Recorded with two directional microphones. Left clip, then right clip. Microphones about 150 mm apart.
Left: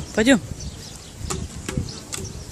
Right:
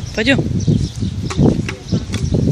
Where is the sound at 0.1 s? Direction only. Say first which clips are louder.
Right 2 dB; 20° left (ahead or behind).